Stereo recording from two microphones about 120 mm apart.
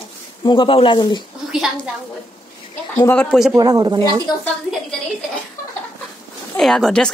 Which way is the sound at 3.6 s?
35° right (ahead or behind).